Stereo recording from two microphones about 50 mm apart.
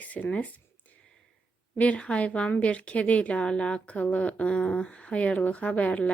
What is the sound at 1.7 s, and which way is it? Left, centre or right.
Speech, left.